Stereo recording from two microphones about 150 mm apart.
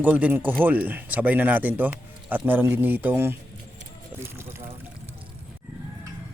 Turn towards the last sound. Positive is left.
turn(degrees=-15)  # may be behind; listen again after turning